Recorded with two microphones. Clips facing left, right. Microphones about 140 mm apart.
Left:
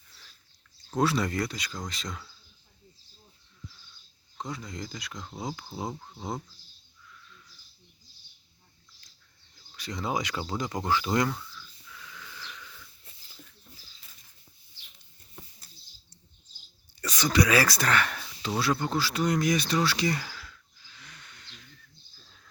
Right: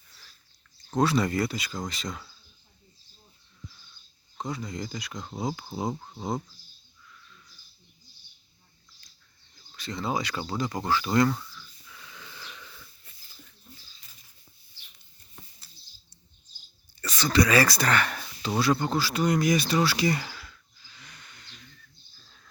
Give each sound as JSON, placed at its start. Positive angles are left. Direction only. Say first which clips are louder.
{"t": 0.9, "sound": "speech", "louder": "right 2 dB", "side_deg": 0}
{"t": 4.4, "sound": "speech", "louder": "right 3 dB", "side_deg": 0}
{"t": 9.7, "sound": "speech", "louder": "right 1 dB", "side_deg": 15}
{"t": 11.9, "sound": "dog", "louder": "left 1 dB", "side_deg": -25}
{"t": 17.0, "sound": "speech", "louder": "right 1 dB", "side_deg": 15}
{"t": 18.4, "sound": "a sound", "louder": "right 3 dB", "side_deg": 0}